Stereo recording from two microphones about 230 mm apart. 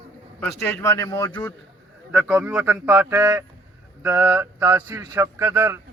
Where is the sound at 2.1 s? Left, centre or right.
Centre.